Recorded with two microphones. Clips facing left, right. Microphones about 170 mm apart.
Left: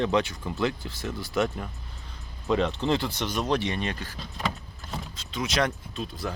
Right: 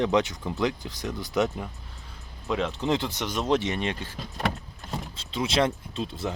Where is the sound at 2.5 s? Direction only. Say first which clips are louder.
Left 3 dB; centre (ahead or behind).